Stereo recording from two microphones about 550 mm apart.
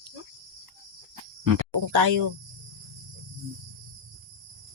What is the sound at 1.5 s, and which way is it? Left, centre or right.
Speech, right.